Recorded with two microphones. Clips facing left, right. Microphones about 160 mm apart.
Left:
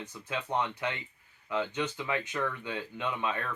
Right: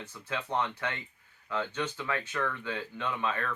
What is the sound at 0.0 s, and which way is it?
Speech, 15° left (ahead or behind).